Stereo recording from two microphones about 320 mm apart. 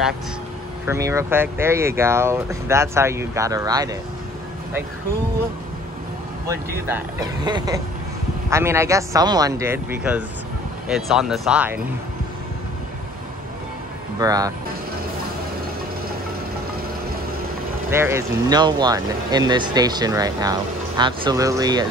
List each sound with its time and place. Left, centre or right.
0.8 s speech: centre
6.9 s speech: centre
14.2 s speech: centre
17.8 s speech: centre